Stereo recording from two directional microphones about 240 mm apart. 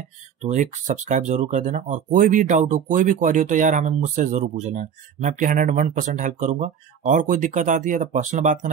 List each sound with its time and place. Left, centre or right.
0.4 s speech: right